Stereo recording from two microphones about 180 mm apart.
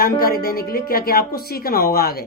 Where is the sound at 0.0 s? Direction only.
55° left (ahead or behind).